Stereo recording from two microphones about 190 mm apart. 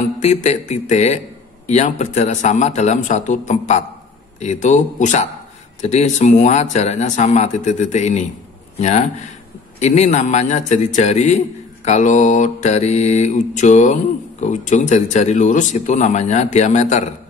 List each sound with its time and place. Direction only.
0.2 s a man's voice: 35° left (ahead or behind)